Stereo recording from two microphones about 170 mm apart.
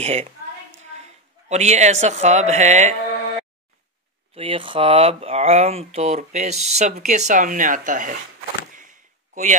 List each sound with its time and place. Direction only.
0.0 s a woman's voice: 40° right (ahead or behind)
1.5 s speech: 40° right (ahead or behind)
4.4 s speech: 30° right (ahead or behind); by 8.2 s 50° right (ahead or behind)
9.3 s speech: 45° right (ahead or behind)